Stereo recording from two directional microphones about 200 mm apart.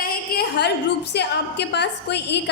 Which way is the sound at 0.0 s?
50° left (ahead or behind).